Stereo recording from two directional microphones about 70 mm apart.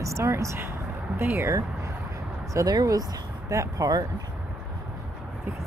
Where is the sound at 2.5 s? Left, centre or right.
Right.